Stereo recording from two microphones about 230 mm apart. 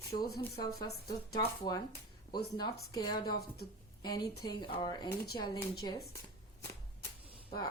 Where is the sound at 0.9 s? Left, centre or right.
Left.